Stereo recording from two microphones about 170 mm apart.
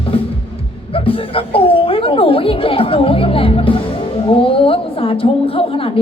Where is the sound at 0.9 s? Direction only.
30° left (ahead or behind).